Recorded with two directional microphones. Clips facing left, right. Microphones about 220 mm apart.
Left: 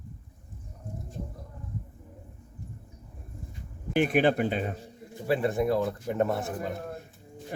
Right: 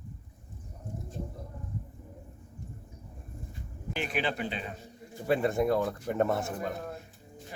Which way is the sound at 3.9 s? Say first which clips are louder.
Left 9 dB; 50° left (ahead or behind).